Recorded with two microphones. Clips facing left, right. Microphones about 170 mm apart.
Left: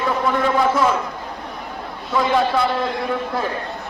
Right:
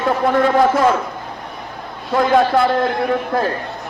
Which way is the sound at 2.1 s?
50° right (ahead or behind).